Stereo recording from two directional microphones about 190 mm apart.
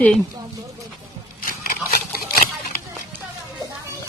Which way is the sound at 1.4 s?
50° left (ahead or behind).